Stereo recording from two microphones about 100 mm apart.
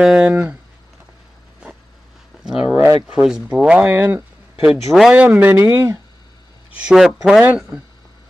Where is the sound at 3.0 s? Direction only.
5° right (ahead or behind).